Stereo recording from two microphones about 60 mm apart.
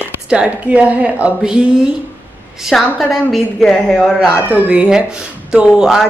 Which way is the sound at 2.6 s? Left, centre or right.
Centre.